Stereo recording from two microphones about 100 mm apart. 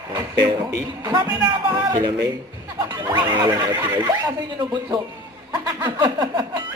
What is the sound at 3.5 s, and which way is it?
Speech, 40° right (ahead or behind).